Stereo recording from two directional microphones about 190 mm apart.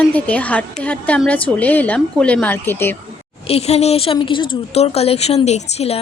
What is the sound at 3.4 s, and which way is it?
A woman's voice, 30° left (ahead or behind).